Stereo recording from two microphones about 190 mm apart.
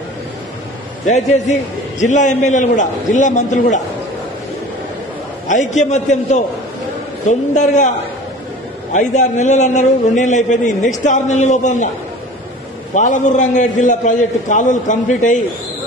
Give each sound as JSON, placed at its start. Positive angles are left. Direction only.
{"t": 1.0, "sound": "a man's voice", "side_deg": 35}
{"t": 5.5, "sound": "a man's voice", "side_deg": 40}
{"t": 7.2, "sound": "a man's voice", "side_deg": 40}
{"t": 8.9, "sound": "a man's voice", "side_deg": 40}
{"t": 12.9, "sound": "a man's voice", "side_deg": 40}